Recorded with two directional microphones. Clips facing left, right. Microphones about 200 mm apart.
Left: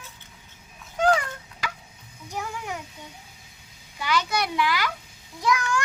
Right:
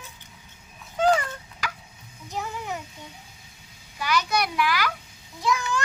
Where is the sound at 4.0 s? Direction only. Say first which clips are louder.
Right 1 dB; 25° left (ahead or behind).